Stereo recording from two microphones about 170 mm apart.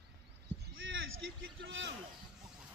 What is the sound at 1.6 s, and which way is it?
Speech, 90° right.